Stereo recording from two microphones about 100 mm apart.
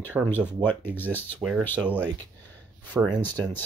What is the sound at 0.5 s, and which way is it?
Speech, 20° left (ahead or behind).